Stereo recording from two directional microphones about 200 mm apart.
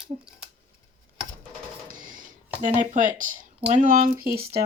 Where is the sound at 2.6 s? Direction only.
40° right (ahead or behind).